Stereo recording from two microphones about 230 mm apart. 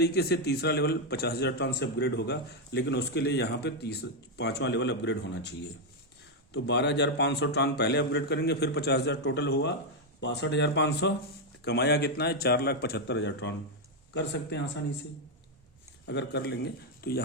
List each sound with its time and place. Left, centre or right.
0.0 s a man's voice: left
16.0 s speech: left